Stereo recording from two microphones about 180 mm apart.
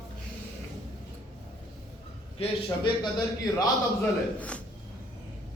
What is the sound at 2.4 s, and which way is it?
A man's voice, 25° left (ahead or behind).